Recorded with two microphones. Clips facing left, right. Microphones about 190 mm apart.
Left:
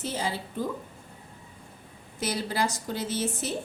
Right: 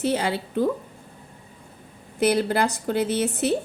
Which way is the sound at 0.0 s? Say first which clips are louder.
Right 8 dB; 70° right (ahead or behind).